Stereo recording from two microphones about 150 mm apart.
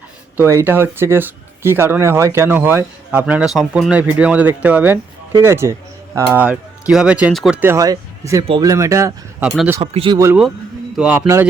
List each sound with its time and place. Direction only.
0.3 s speech: 15° right (ahead or behind)
7.6 s speech: 20° right (ahead or behind)
9.4 s speech: 10° right (ahead or behind)
9.8 s speech: 40° right (ahead or behind)
10.9 s a man's voice: 5° right (ahead or behind)